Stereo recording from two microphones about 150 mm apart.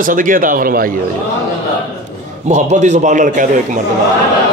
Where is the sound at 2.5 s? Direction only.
50° right (ahead or behind).